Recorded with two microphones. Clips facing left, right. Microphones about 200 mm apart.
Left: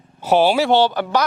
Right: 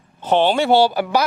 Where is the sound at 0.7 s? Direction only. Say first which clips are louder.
Right 1 dB; 10° right (ahead or behind).